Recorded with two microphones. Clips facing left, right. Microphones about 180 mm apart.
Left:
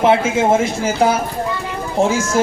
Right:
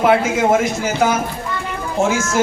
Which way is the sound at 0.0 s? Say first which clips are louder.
Left 1 dB; 25° left (ahead or behind).